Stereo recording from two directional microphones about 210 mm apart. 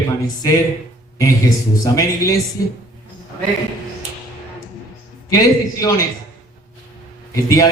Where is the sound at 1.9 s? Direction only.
15° left (ahead or behind).